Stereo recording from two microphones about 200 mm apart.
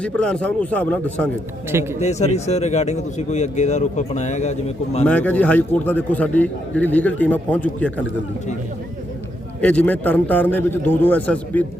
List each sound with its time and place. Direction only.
0.0 s a man's voice: 5° left (ahead or behind)
2.0 s speech: 35° left (ahead or behind)
5.0 s a man's voice: 5° left (ahead or behind)
9.6 s a man's voice: 5° left (ahead or behind)